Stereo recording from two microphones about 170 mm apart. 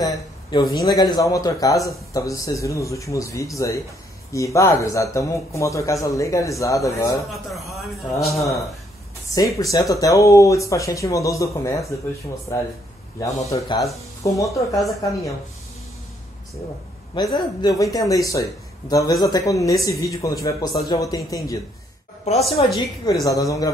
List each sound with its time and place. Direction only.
0.0 s a sound: 25° left (ahead or behind)
0.8 s speech: 25° left (ahead or behind)
7.6 s speech: centre (ahead or behind)
9.3 s speech: 20° left (ahead or behind)
13.2 s speech: 20° left (ahead or behind)
17.1 s speech: 25° left (ahead or behind)
22.2 s a woman's voice: 40° left (ahead or behind)
23.2 s speech: 20° left (ahead or behind)